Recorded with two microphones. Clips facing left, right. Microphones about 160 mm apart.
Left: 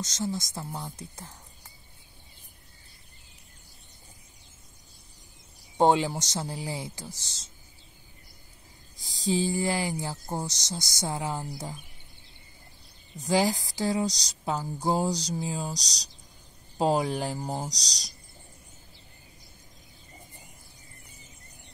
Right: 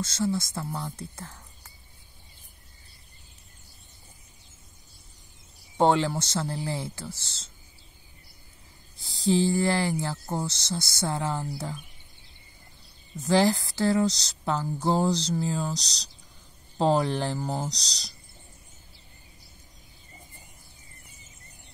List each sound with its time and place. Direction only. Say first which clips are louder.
0.0 s speech: right 4 dB; 15° left (ahead or behind)
5.8 s speech: even; 15° left (ahead or behind)
8.9 s speech: right 4 dB; 15° left (ahead or behind)
13.2 s speech: right 3 dB; 15° left (ahead or behind)